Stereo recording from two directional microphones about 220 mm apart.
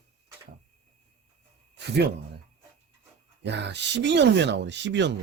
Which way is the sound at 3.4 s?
50° right (ahead or behind).